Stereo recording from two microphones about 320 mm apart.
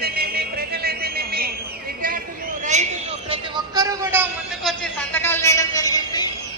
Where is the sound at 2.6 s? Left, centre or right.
Right.